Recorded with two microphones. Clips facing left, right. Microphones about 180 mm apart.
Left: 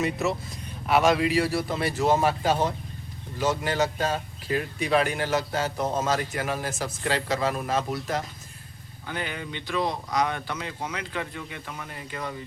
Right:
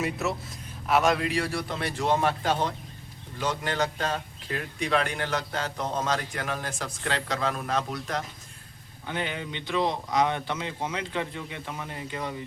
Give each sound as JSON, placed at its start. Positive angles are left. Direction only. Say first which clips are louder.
{"t": 0.0, "sound": "speech", "louder": "left 3 dB", "side_deg": 0}
{"t": 9.0, "sound": "speech", "louder": "right 1 dB", "side_deg": -20}